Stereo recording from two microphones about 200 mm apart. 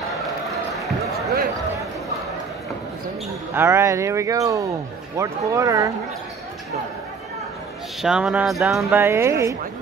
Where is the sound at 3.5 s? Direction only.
10° right (ahead or behind).